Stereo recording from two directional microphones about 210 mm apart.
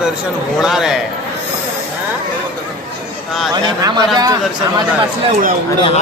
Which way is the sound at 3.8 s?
20° right (ahead or behind).